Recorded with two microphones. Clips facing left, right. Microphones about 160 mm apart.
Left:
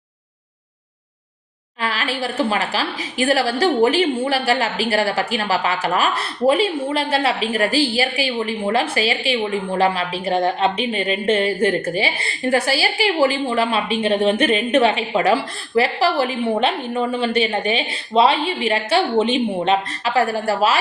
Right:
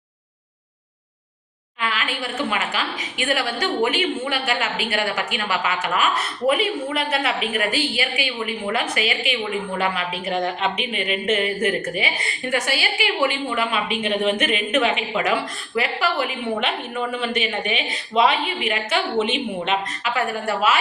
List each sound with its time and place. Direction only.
1.8 s a woman's voice: 35° left (ahead or behind)